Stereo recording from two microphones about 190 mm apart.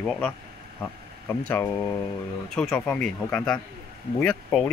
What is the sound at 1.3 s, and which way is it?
Speech, 10° left (ahead or behind).